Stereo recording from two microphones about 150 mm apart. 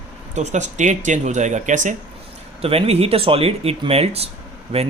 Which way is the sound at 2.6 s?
40° right (ahead or behind).